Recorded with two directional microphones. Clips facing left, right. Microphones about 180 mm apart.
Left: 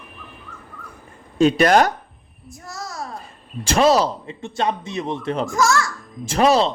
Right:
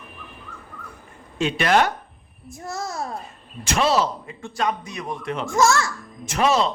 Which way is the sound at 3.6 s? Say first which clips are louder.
Left 4 dB; 35° left (ahead or behind).